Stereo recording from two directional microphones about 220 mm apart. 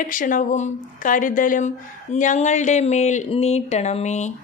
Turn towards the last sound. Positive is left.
turn(degrees=30)  # may be behind; listen again after turning